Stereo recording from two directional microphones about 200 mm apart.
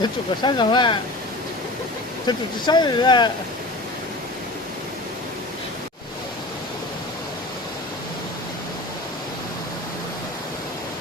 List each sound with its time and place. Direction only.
0.0 s speech: 20° left (ahead or behind)
2.2 s speech: 20° left (ahead or behind)